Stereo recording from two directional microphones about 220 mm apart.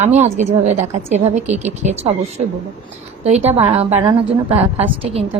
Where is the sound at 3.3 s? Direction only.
30° right (ahead or behind).